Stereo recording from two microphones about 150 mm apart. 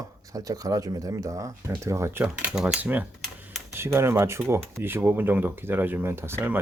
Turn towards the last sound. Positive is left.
turn(degrees=-15)  # may be behind; listen again after turning